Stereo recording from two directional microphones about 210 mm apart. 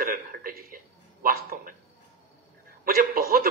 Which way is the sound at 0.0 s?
45° right (ahead or behind).